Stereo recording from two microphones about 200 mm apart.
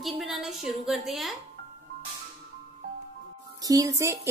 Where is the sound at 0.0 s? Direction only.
Centre (ahead or behind).